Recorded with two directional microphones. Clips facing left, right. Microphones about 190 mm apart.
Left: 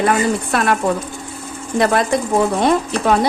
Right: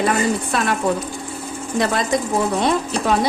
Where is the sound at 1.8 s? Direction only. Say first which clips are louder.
Left 5 dB; 55° left (ahead or behind).